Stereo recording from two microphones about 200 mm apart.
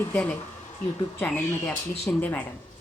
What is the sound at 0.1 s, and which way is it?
Speech, 5° left (ahead or behind).